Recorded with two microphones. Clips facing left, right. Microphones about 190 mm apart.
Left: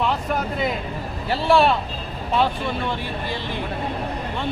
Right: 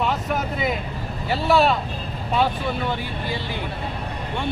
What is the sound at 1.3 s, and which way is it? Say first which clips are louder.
Speech: left 1 dB; centre (ahead or behind).